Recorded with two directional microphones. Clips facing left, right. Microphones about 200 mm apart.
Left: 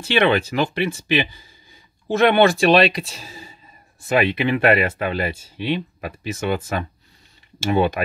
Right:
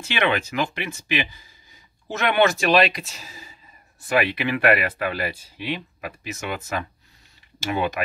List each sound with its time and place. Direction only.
0.0 s speech: 30° left (ahead or behind)